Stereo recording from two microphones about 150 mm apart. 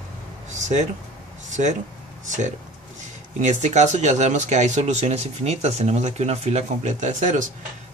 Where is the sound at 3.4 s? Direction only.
50° right (ahead or behind).